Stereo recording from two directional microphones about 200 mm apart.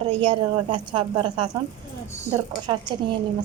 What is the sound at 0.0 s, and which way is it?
A woman's voice, 25° right (ahead or behind).